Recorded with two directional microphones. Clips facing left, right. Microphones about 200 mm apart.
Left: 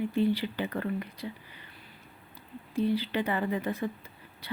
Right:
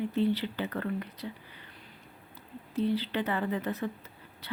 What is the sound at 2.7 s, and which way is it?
Speech, 10° left (ahead or behind).